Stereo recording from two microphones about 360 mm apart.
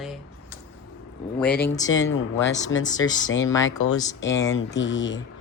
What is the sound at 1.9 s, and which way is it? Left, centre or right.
Speech, left.